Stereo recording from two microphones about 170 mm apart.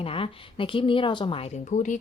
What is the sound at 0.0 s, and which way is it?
A woman's voice, 35° left (ahead or behind).